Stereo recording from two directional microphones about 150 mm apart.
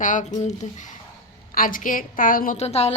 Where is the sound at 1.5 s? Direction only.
65° left (ahead or behind).